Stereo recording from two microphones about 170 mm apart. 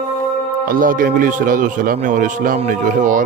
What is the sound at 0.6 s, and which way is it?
A man's voice, 55° right (ahead or behind).